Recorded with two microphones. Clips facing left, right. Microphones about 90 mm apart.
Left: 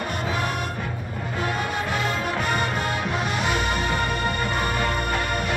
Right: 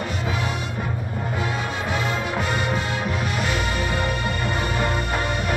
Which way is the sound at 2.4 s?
50° left (ahead or behind).